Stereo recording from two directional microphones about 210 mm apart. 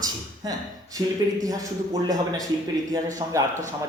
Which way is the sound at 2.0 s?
15° right (ahead or behind).